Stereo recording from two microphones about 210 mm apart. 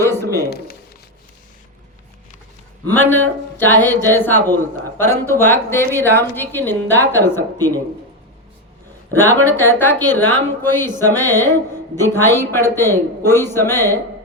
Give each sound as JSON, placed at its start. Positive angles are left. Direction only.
{"t": 0.0, "sound": "a sound", "side_deg": 10}
{"t": 2.9, "sound": "speech", "side_deg": 10}
{"t": 9.1, "sound": "speech", "side_deg": 10}